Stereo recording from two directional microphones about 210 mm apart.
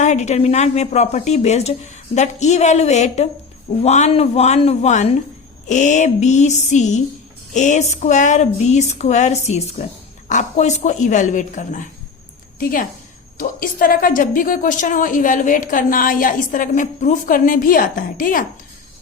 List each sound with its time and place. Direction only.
0.0 s a woman's voice: 35° left (ahead or behind)
13.4 s a woman's voice: 45° left (ahead or behind)